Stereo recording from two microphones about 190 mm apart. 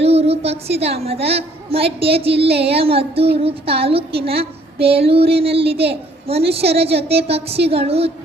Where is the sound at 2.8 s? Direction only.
30° right (ahead or behind).